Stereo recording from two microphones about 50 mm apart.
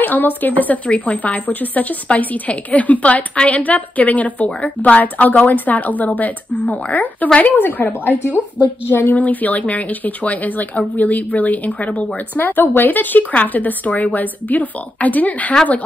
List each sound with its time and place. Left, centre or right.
0.0 s a woman's voice: left